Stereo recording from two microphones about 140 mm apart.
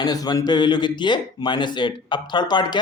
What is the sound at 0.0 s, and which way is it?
Speech, 30° left (ahead or behind).